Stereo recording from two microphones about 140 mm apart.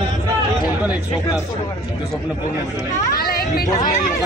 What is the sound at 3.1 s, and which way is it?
Speech, 90° left.